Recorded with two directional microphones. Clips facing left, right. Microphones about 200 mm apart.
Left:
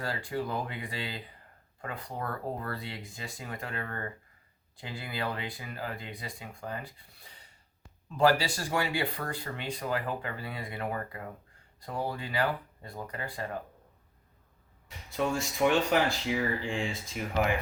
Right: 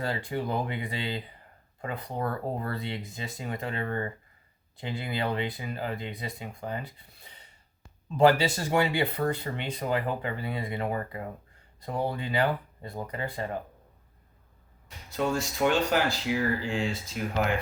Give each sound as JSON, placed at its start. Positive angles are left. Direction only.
{"t": 0.0, "sound": "speech", "side_deg": -20}
{"t": 14.8, "sound": "speech", "side_deg": 0}